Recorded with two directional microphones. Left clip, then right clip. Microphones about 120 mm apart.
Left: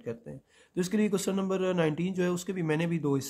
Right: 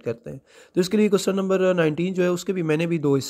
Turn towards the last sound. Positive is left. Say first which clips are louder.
# right 8 dB
turn(degrees=-35)  # may be behind; listen again after turning